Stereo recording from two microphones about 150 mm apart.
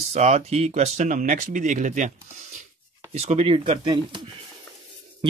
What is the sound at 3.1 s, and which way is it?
Speech, 45° right (ahead or behind).